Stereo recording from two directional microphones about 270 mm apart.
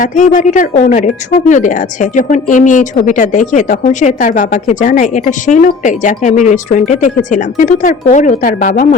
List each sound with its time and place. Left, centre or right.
0.0 s speech: left